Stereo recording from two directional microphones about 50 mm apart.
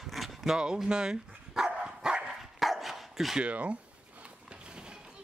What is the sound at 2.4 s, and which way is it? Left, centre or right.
Dog, centre.